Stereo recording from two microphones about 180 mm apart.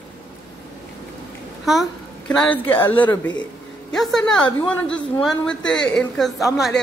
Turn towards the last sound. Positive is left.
turn(degrees=0)  # may be behind; listen again after turning